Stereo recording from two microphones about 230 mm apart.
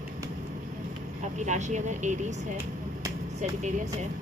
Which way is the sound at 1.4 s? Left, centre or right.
Right.